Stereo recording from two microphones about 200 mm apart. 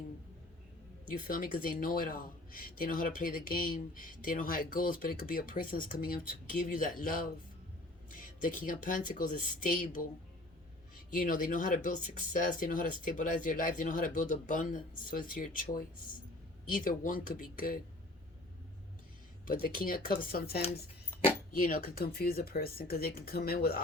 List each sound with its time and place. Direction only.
1.3 s speech: 45° left (ahead or behind)
11.1 s speech: 45° left (ahead or behind)
19.5 s speech: 45° left (ahead or behind)